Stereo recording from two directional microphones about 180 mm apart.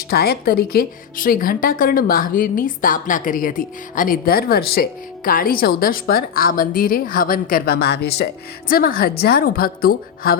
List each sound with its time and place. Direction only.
0.1 s speech: 60° left (ahead or behind)